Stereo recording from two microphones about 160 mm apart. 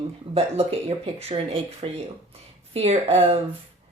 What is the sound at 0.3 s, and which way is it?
Speech, 40° right (ahead or behind).